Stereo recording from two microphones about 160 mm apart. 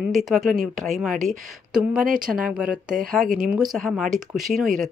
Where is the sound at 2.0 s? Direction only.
60° right (ahead or behind).